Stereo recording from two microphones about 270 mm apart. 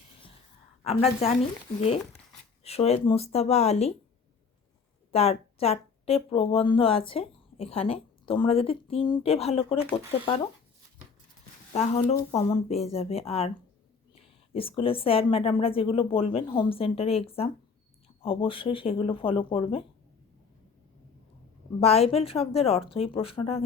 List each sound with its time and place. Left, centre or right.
0.9 s speech: left
2.6 s speech: left
5.1 s speech: left
11.7 s speech: left
21.8 s speech: left